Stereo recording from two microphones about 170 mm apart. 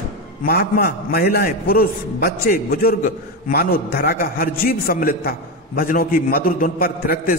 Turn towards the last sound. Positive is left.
turn(degrees=60)  # may be behind; listen again after turning